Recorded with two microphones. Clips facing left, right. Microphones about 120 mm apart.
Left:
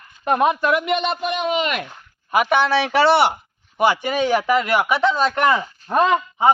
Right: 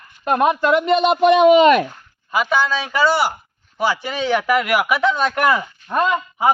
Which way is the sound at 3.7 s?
55° left (ahead or behind).